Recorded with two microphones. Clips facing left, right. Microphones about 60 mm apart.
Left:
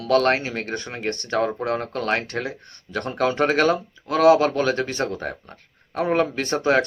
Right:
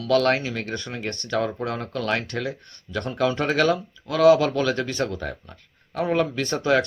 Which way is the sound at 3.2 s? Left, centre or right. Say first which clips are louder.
Left 2 dB; left.